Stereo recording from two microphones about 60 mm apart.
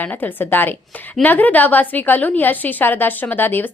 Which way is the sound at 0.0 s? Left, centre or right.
Left.